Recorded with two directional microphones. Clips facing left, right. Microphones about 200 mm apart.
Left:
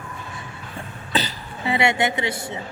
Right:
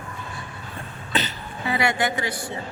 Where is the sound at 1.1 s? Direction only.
35° left (ahead or behind).